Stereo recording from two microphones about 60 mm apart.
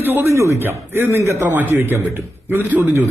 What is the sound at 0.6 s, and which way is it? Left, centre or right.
A man's voice, right.